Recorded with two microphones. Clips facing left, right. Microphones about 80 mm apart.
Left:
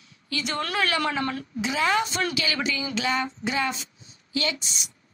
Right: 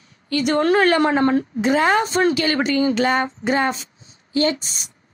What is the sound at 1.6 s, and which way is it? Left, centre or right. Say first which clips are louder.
A woman's voice: right 5 dB; right.